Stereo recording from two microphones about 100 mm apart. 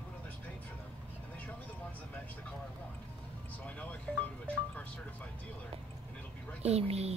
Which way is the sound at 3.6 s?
15° left (ahead or behind).